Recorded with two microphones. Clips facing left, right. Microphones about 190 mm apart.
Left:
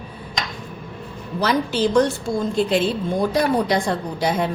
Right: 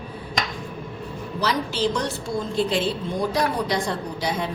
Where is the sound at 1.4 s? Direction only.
55° left (ahead or behind).